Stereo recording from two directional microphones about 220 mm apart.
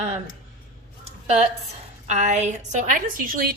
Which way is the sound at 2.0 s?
30° right (ahead or behind).